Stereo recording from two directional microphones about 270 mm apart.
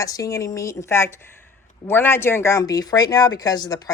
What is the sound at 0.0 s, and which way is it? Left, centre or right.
Speech, centre.